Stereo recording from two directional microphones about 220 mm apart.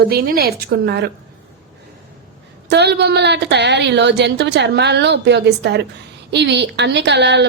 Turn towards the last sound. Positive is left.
turn(degrees=-50)  # may be behind; listen again after turning